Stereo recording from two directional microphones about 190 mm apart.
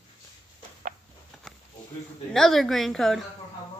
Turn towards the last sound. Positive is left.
turn(degrees=0)  # may be behind; listen again after turning